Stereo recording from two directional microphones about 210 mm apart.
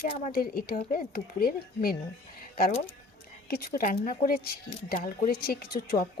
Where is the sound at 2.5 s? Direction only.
45° left (ahead or behind).